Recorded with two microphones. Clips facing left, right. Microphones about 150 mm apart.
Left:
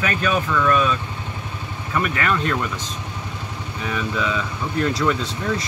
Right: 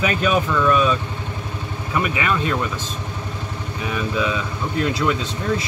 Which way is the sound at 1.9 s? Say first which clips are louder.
Even; 10° right (ahead or behind).